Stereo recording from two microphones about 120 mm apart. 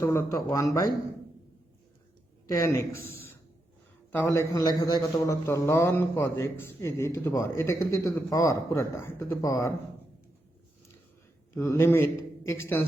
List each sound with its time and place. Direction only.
0.3 s a man's voice: 30° left (ahead or behind)
2.5 s a man's voice: 25° left (ahead or behind)
4.5 s a man's voice: 35° left (ahead or behind)
5.3 s a man's voice: 25° left (ahead or behind)
11.5 s a man's voice: 20° left (ahead or behind)